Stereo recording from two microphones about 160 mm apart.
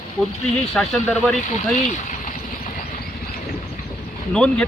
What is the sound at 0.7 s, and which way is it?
Speech, centre (ahead or behind).